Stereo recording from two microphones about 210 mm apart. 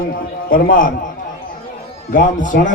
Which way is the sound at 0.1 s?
45° left (ahead or behind).